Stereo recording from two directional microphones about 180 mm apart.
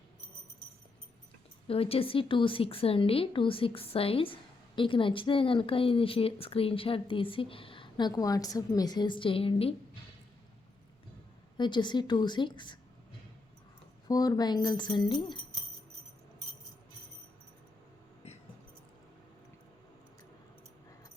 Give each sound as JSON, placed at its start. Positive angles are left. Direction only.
{"t": 1.6, "sound": "a woman's voice", "side_deg": 30}
{"t": 11.5, "sound": "a woman's voice", "side_deg": 25}
{"t": 14.1, "sound": "a woman's voice", "side_deg": 20}